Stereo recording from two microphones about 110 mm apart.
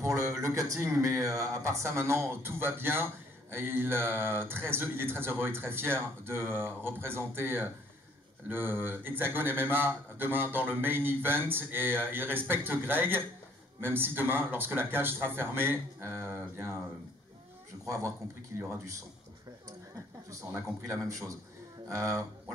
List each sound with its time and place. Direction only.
0.0 s speech: 25° right (ahead or behind)
17.8 s speech: 30° right (ahead or behind)
20.2 s speech: 30° right (ahead or behind)